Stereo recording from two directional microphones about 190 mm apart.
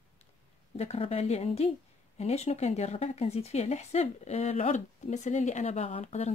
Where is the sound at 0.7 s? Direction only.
35° left (ahead or behind).